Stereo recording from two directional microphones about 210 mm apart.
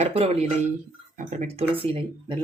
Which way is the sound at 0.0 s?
30° right (ahead or behind).